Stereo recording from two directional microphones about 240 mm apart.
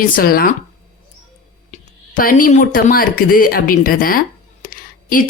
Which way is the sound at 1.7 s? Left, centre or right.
Left.